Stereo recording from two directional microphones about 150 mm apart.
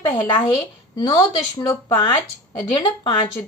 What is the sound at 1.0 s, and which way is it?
A woman's voice, 25° left (ahead or behind).